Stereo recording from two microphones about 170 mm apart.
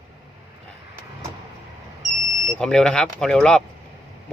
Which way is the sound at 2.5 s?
5° left (ahead or behind).